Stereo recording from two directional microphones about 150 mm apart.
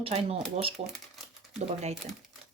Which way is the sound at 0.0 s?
40° right (ahead or behind).